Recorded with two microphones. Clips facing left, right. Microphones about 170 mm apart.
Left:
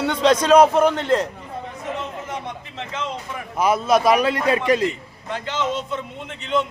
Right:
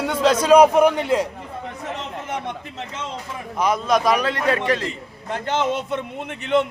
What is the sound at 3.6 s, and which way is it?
A man's voice, 5° left (ahead or behind).